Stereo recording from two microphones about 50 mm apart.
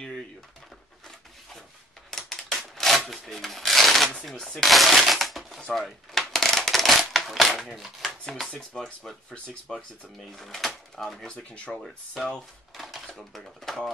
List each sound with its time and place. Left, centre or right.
2.0 s shuffling cards: centre
4.6 s speech: centre
5.9 s a sound: centre
8.5 s speech: centre
10.2 s speech: centre
11.3 s speech: left
11.7 s speech: centre
12.7 s a sound: centre
13.2 s speech: centre